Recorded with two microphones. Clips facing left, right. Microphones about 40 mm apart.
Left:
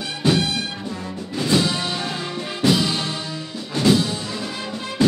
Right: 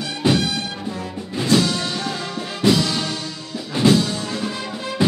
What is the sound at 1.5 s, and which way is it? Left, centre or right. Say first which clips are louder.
Music: right 2 dB; centre.